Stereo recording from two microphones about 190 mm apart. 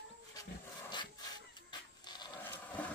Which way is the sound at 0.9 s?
20° left (ahead or behind).